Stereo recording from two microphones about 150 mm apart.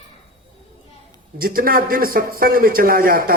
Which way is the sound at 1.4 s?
75° right (ahead or behind).